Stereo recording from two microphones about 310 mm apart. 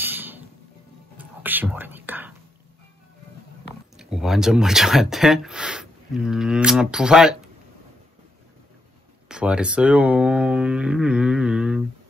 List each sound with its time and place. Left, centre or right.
0.0 s music: centre
1.1 s whispering: centre
3.9 s speech: centre
9.3 s speech: centre